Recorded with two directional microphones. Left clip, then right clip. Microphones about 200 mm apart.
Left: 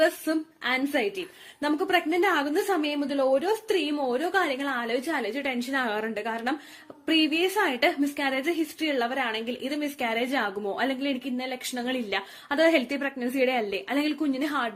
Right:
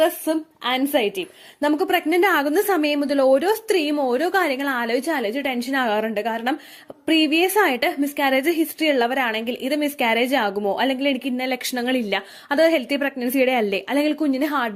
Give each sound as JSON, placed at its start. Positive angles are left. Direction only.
{"t": 0.0, "sound": "a woman's voice", "side_deg": -30}